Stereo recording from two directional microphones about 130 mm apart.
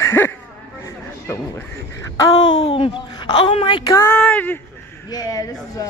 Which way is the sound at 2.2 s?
35° left (ahead or behind).